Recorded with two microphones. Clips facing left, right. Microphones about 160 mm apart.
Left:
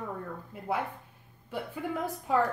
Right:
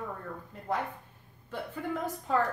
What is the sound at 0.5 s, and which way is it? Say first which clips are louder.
A woman's voice: left 1 dB; 10° left (ahead or behind).